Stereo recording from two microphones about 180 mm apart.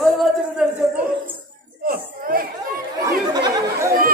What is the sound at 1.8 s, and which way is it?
Speech, 50° right (ahead or behind).